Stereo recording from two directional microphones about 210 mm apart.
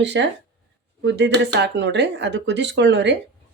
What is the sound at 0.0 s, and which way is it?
Speech, 55° right (ahead or behind).